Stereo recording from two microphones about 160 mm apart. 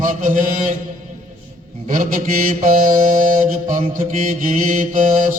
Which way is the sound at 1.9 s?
60° right (ahead or behind).